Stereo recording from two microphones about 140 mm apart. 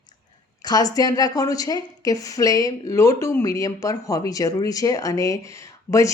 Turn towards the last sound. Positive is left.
turn(degrees=20)  # may be behind; listen again after turning